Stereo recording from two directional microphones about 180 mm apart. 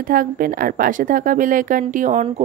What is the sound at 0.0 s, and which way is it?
A woman's voice, 50° right (ahead or behind).